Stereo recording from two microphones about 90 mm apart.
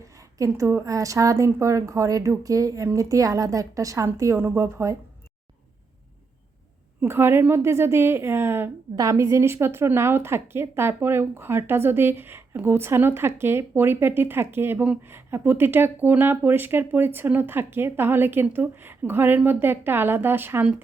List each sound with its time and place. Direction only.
0.0 s a woman's voice: 35° right (ahead or behind)
7.0 s a woman's voice: 25° right (ahead or behind)